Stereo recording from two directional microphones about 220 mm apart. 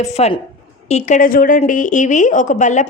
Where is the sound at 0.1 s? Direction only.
30° left (ahead or behind).